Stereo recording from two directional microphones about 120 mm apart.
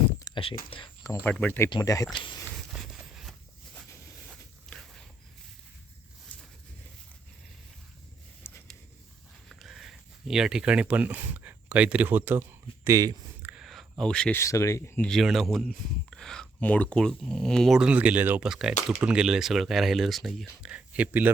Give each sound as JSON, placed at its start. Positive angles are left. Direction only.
{"t": 0.3, "sound": "speech", "side_deg": 45}
{"t": 1.2, "sound": "speech", "side_deg": 10}
{"t": 1.8, "sound": "speech", "side_deg": 30}
{"t": 2.1, "sound": "speech", "side_deg": 40}
{"t": 2.7, "sound": "a sound", "side_deg": -5}
{"t": 4.7, "sound": "a sound", "side_deg": 5}
{"t": 8.4, "sound": "a sound", "side_deg": 20}
{"t": 9.5, "sound": "speech", "side_deg": 0}
{"t": 13.4, "sound": "a sound", "side_deg": -10}
{"t": 14.0, "sound": "speech", "side_deg": 5}
{"t": 14.3, "sound": "speech", "side_deg": 25}
{"t": 15.0, "sound": "speech", "side_deg": 0}
{"t": 18.4, "sound": "speech", "side_deg": -5}